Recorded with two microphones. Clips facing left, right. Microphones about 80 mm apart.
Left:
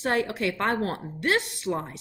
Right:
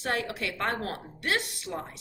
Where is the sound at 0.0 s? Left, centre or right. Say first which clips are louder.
Left 5 dB; left.